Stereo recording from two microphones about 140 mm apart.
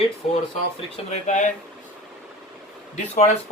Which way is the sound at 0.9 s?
60° left (ahead or behind).